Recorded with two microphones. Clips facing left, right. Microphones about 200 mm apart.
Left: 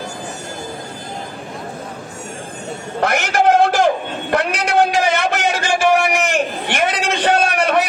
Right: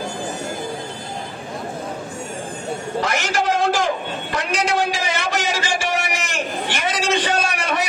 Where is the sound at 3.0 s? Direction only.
60° left (ahead or behind).